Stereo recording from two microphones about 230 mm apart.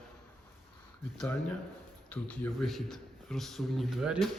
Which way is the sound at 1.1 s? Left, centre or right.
Centre.